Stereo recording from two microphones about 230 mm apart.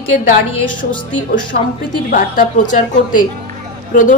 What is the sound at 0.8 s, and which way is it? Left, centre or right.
A woman's voice, left.